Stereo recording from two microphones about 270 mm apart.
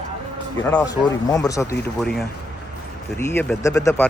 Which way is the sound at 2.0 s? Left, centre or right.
Centre.